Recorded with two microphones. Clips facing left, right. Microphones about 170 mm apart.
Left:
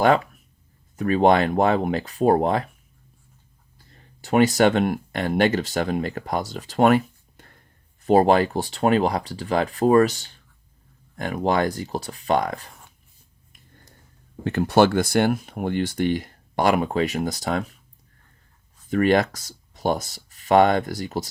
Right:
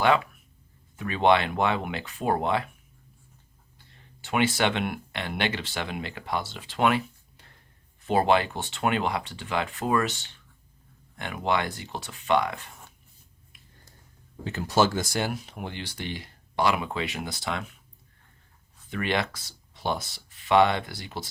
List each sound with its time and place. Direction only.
0.9 s speech: 40° left (ahead or behind)
3.8 s speech: 40° left (ahead or behind)
14.4 s speech: 55° left (ahead or behind); by 17.7 s 40° left (ahead or behind)
18.9 s speech: 45° left (ahead or behind)